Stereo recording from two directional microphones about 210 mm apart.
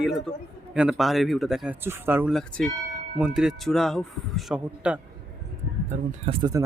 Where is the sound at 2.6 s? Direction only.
5° left (ahead or behind).